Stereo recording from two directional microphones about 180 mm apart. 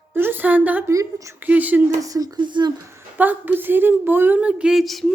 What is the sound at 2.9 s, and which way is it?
A woman's voice, 10° right (ahead or behind).